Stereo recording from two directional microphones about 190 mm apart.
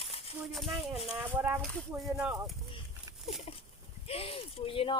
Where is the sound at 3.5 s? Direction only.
30° left (ahead or behind).